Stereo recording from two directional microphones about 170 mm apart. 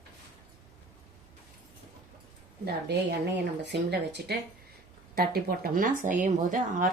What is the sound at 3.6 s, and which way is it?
Speech, 85° right.